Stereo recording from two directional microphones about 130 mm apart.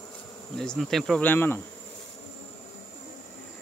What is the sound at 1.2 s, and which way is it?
Insect, 15° left (ahead or behind).